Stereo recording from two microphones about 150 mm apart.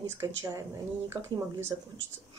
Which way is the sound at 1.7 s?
20° right (ahead or behind).